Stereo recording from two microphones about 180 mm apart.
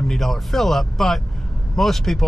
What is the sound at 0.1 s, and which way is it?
Speech, centre (ahead or behind).